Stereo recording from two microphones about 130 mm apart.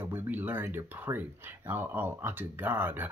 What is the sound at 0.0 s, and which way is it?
Speech, 15° right (ahead or behind).